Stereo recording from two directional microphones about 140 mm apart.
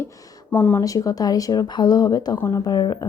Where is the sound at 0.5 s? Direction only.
10° left (ahead or behind).